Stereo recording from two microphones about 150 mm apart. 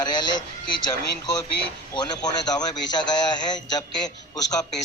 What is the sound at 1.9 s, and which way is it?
Speech, 25° left (ahead or behind).